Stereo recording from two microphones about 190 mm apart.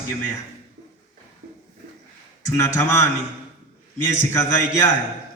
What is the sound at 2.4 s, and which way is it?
A man's voice, 15° left (ahead or behind).